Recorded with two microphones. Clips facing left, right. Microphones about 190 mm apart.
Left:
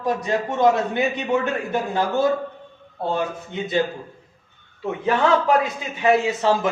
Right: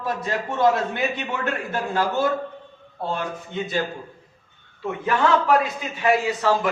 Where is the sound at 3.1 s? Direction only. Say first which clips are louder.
Left 3 dB; 20° left (ahead or behind).